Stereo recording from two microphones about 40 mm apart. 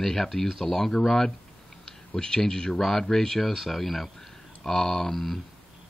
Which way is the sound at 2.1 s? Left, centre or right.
Centre.